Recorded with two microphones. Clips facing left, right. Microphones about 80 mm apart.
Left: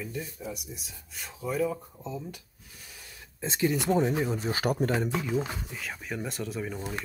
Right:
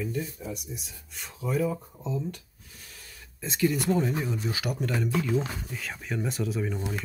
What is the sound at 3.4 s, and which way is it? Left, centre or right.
Speech, left.